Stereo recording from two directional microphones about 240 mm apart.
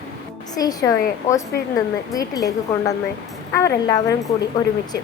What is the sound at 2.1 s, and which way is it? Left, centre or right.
A woman's voice, centre.